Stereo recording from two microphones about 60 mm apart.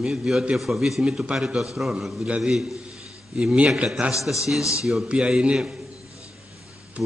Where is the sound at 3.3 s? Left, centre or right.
Centre.